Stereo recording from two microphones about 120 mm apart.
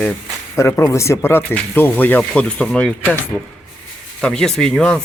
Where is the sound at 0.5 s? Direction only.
25° left (ahead or behind).